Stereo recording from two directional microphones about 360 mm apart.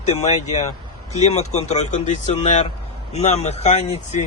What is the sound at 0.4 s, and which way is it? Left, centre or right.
A man's voice, centre.